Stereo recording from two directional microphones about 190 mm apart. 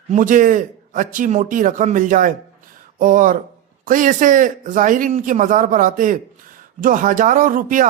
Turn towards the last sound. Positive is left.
turn(degrees=-45)  # may be behind; listen again after turning